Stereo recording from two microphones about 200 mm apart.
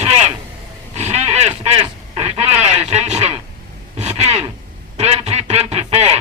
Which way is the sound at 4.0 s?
35° right (ahead or behind).